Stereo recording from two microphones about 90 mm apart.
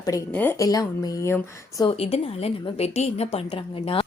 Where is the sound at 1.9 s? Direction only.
90° left.